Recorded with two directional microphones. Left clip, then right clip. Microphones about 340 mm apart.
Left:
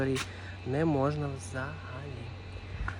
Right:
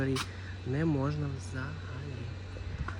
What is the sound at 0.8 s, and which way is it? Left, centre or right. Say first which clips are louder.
Speech: left 4 dB; left.